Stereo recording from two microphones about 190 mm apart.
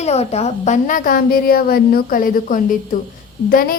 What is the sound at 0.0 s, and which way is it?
Speech, 35° left (ahead or behind).